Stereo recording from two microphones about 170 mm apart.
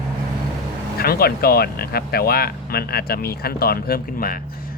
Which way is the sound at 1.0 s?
65° left (ahead or behind).